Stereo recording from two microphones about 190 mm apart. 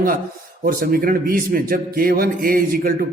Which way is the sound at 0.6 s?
50° right (ahead or behind).